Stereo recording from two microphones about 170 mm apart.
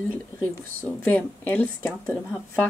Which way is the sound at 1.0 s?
10° left (ahead or behind).